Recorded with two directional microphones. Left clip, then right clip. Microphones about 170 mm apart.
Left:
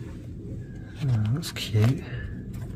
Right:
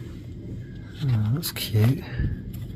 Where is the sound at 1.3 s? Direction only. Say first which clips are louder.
Right 2 dB; 15° right (ahead or behind).